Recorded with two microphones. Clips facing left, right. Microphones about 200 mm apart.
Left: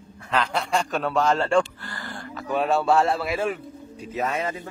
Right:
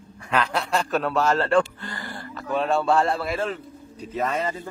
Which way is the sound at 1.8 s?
20° right (ahead or behind).